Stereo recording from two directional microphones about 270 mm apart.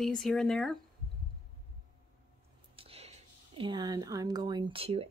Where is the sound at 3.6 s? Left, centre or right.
Centre.